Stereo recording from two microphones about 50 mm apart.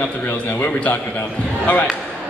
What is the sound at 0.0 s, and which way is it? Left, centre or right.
Speech, left.